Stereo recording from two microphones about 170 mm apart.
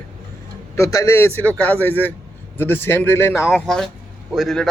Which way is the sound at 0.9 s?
20° left (ahead or behind).